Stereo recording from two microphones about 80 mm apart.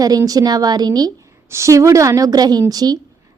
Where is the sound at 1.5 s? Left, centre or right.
Right.